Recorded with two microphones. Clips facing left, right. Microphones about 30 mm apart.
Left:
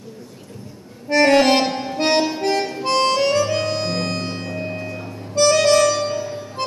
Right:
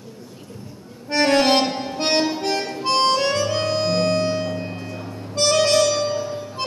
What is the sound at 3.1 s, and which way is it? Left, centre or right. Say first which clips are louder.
Harmonica: left 2 dB; centre.